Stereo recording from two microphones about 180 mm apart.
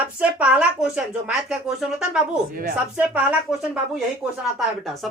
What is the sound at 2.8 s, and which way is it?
Speech, 5° right (ahead or behind).